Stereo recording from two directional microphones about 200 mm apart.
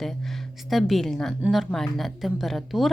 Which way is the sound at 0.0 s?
Centre (ahead or behind).